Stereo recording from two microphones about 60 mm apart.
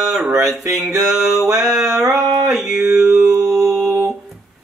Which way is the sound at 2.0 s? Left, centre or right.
Right.